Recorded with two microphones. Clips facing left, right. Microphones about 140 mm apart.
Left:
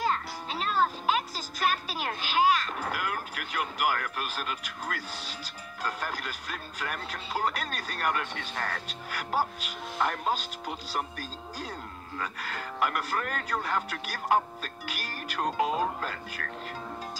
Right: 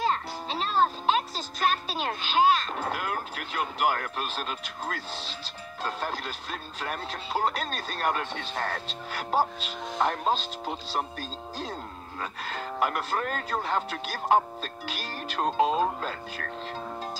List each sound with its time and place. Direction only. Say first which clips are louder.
0.0 s speech: right 2 dB; 25° right (ahead or behind)